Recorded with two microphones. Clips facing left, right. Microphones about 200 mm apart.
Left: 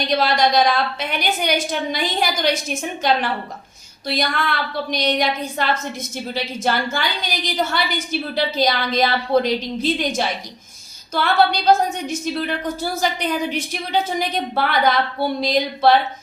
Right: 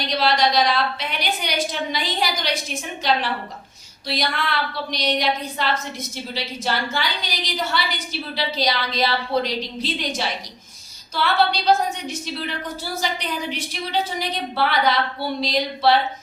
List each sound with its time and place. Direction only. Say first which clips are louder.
0.2 s a woman's voice: even; 50° left (ahead or behind)
11.1 s a woman's voice: left 3 dB; 50° left (ahead or behind)